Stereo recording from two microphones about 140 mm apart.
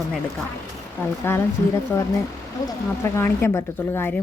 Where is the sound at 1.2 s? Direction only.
15° left (ahead or behind).